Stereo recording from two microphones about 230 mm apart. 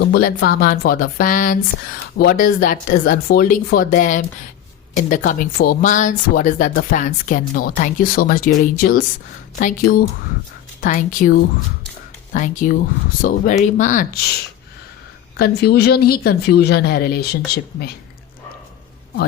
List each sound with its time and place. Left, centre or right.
0.0 s speech: left